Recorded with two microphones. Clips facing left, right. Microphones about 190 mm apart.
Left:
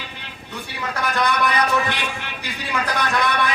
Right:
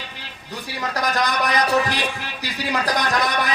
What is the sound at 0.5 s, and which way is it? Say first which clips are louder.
A man's voice: right 2 dB; 35° right (ahead or behind).